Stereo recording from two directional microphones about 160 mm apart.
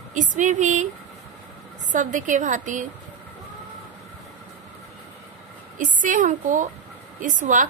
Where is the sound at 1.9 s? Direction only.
50° right (ahead or behind).